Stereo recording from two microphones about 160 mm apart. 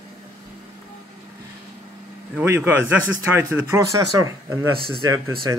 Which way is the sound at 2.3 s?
10° right (ahead or behind).